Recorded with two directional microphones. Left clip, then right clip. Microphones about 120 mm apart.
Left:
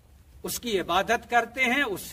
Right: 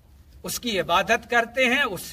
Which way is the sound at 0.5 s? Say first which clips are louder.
Right 3 dB; 30° left (ahead or behind).